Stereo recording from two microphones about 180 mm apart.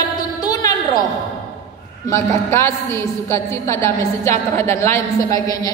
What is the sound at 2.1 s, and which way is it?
A man's voice, 15° left (ahead or behind).